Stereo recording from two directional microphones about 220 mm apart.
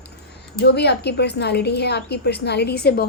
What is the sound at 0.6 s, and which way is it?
A woman's voice, 50° left (ahead or behind).